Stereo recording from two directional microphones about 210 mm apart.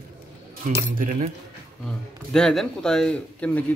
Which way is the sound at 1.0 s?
35° right (ahead or behind).